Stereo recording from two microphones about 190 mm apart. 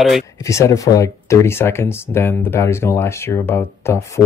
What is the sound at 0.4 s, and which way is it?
Speech, 15° left (ahead or behind).